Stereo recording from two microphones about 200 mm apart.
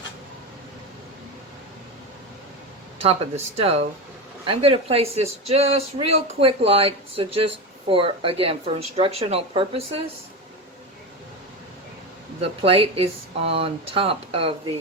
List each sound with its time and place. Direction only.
3.0 s speech: 30° right (ahead or behind)
12.4 s speech: 30° right (ahead or behind)